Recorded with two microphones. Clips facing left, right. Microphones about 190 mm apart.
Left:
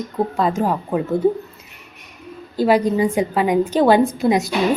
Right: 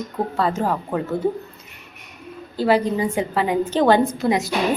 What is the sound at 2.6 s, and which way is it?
A woman's voice, 15° left (ahead or behind).